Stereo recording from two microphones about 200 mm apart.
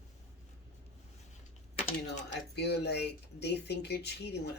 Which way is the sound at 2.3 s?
55° left (ahead or behind).